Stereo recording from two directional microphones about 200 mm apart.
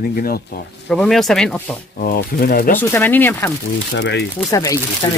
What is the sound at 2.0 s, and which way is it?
Speech, 45° left (ahead or behind).